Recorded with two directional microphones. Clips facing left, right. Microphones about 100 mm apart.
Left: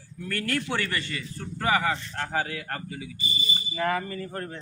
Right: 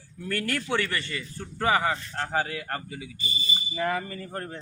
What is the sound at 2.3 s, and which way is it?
Speech, 25° right (ahead or behind).